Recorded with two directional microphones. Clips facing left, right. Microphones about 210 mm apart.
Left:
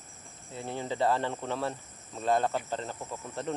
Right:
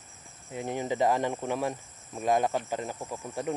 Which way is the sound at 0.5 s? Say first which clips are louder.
Right 4 dB; 15° right (ahead or behind).